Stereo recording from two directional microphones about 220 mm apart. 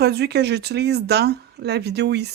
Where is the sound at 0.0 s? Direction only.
50° right (ahead or behind).